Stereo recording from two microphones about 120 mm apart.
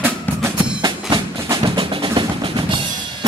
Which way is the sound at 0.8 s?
35° right (ahead or behind).